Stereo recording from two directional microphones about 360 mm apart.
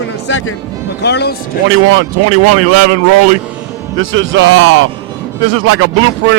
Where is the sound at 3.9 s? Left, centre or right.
Right.